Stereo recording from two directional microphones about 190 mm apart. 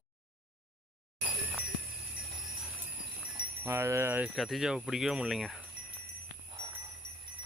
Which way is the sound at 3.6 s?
15° right (ahead or behind).